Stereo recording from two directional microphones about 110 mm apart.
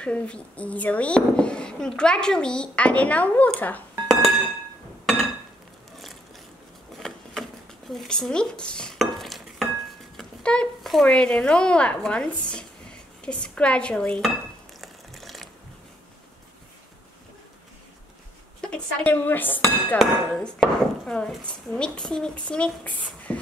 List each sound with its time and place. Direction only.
0.0 s speech: 10° left (ahead or behind)
4.1 s glass: centre (ahead or behind)
7.0 s a sound: centre (ahead or behind)
7.9 s dishes: 5° left (ahead or behind)
10.1 s speech: 10° left (ahead or behind)
14.8 s music: centre (ahead or behind)
18.6 s dishes: 10° left (ahead or behind)
20.0 s speech: centre (ahead or behind)